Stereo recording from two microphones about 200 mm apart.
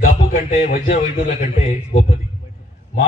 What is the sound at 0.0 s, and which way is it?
Speech, 45° left (ahead or behind).